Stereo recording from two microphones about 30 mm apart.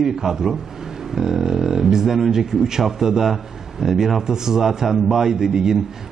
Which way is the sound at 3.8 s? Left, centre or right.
Centre.